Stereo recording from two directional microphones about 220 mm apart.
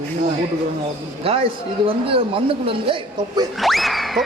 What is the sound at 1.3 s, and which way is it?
Speech, 25° right (ahead or behind).